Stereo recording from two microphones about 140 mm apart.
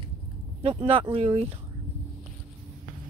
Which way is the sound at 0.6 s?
40° right (ahead or behind).